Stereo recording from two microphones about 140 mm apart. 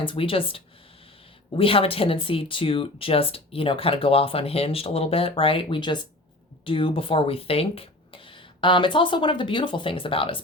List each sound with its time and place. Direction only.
0.0 s speech: 40° left (ahead or behind)